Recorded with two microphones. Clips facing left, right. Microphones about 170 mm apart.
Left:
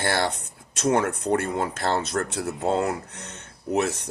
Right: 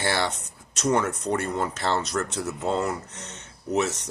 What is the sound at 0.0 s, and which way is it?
Speech, 50° left (ahead or behind).